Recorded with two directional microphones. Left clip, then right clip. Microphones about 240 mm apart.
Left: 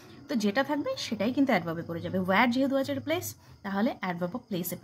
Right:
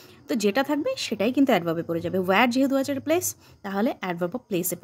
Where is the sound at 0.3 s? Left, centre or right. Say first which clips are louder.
Right 5 dB; right.